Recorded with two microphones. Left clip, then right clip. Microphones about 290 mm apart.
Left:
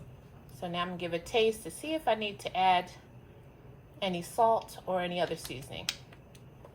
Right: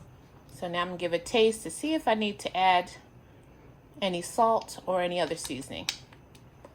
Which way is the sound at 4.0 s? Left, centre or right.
Right.